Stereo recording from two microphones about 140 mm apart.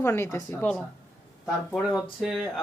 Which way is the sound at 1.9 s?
Centre (ahead or behind).